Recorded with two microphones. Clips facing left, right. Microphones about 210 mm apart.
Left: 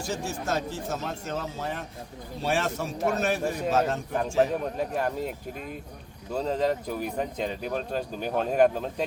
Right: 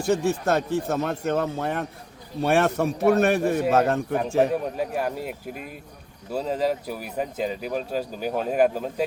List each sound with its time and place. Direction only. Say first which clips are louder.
0.0 s speech: right 9 dB; 60° right (ahead or behind)
4.8 s speech: right 1 dB; 5° right (ahead or behind)